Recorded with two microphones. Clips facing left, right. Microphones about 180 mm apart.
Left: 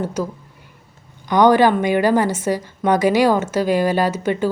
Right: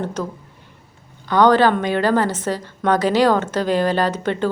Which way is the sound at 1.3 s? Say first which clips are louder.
Left 1 dB; 15° left (ahead or behind).